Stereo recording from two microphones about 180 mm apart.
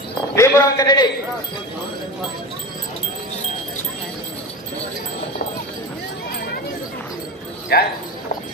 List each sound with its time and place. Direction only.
0.4 s a man's voice: 20° left (ahead or behind)
7.7 s speech: 60° left (ahead or behind)